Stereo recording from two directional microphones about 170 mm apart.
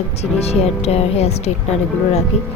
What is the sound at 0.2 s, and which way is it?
A woman's voice, 40° left (ahead or behind).